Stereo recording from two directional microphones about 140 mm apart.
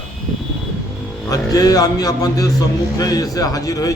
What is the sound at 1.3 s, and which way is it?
A man's voice, 25° left (ahead or behind).